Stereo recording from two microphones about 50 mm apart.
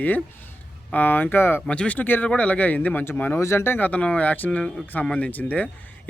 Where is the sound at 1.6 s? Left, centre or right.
Left.